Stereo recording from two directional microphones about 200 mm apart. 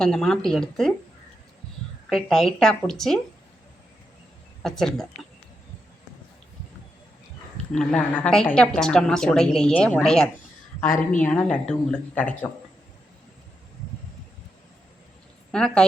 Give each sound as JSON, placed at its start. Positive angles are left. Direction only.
{"t": 0.0, "sound": "a woman's voice", "side_deg": 0}
{"t": 2.0, "sound": "a woman's voice", "side_deg": 0}
{"t": 4.6, "sound": "a woman's voice", "side_deg": 0}
{"t": 7.7, "sound": "a woman's voice", "side_deg": 5}
{"t": 15.5, "sound": "a woman's voice", "side_deg": 5}